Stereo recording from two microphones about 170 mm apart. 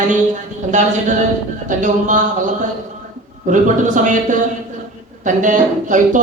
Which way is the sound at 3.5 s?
50° right (ahead or behind).